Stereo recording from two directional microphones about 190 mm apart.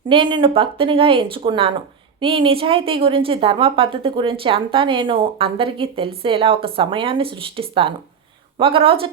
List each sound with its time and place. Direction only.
0.1 s a woman's voice: 25° right (ahead or behind)